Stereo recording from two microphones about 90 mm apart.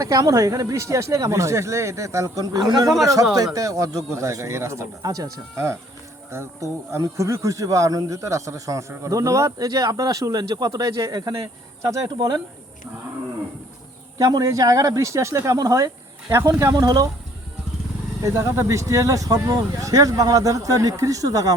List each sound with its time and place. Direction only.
0.0 s speech: 40° right (ahead or behind)
6.3 s speech: 30° right (ahead or behind)
14.2 s speech: 40° right (ahead or behind)
16.7 s speech: 45° right (ahead or behind)
18.2 s speech: 30° right (ahead or behind)